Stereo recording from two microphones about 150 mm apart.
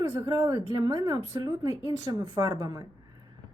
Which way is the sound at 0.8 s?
25° right (ahead or behind).